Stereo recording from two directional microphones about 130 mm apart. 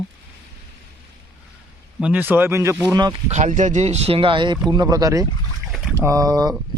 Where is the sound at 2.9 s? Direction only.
30° right (ahead or behind).